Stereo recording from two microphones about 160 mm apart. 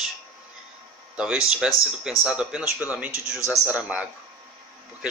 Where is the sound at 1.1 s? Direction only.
5° right (ahead or behind).